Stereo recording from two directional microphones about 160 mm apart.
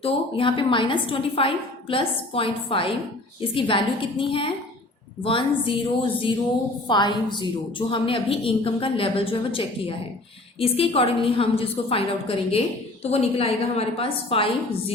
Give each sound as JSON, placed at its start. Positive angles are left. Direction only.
{"t": 0.0, "sound": "a woman's voice", "side_deg": 35}
{"t": 6.8, "sound": "a woman's voice", "side_deg": 30}